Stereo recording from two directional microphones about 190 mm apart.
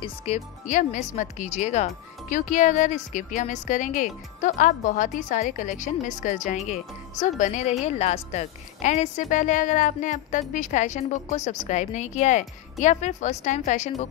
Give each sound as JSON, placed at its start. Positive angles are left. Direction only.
{"t": 0.0, "sound": "speech", "side_deg": 35}